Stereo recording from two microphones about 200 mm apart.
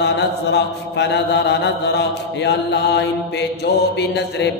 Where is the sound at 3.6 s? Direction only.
55° left (ahead or behind).